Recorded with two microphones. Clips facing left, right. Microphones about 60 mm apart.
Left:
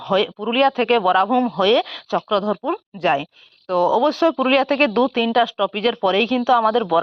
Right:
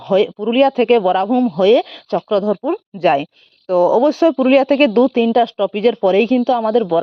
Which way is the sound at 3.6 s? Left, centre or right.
Left.